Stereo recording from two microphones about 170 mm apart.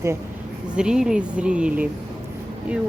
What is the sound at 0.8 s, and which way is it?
Speech, 5° right (ahead or behind).